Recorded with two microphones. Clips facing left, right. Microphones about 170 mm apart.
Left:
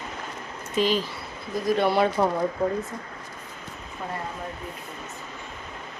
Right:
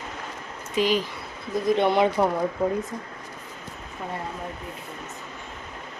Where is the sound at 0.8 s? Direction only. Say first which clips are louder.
Right 1 dB; 15° right (ahead or behind).